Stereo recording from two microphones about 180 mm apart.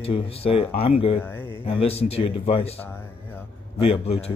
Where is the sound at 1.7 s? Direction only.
35° left (ahead or behind).